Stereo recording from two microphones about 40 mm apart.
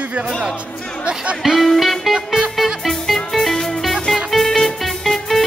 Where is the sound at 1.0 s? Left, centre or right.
Right.